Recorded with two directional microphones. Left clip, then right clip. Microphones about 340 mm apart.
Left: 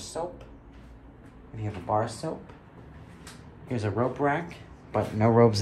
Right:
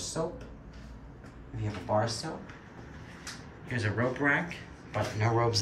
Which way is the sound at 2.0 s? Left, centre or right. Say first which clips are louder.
Left 1 dB; centre.